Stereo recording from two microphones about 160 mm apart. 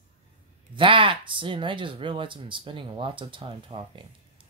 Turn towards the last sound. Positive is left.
turn(degrees=-35)  # may be behind; listen again after turning